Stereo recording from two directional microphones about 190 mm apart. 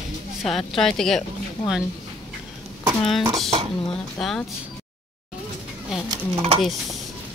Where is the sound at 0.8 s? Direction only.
Centre (ahead or behind).